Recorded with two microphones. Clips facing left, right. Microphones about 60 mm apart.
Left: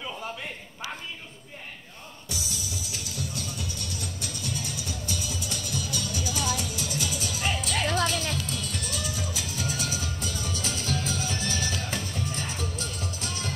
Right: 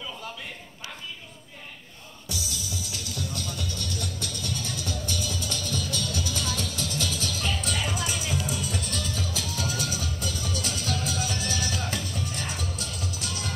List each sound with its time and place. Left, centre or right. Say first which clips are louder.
2.2 s music: right 1 dB; left
7.6 s music: left 3 dB; centre; by 13.5 s left